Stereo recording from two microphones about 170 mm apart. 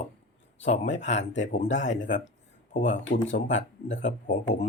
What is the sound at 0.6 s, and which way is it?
Speech, 45° left (ahead or behind).